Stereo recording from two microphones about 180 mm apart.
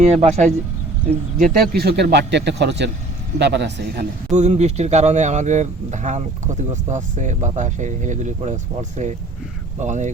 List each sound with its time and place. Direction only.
0.0 s speech: 35° right (ahead or behind)
1.7 s speech: 60° right (ahead or behind)
4.3 s speech: 40° right (ahead or behind)